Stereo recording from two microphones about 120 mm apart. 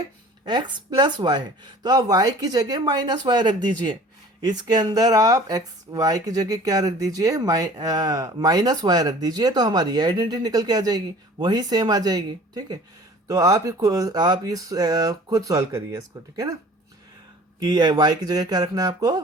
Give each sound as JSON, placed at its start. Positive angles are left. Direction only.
{"t": 0.4, "sound": "speech", "side_deg": -40}
{"t": 17.6, "sound": "speech", "side_deg": -35}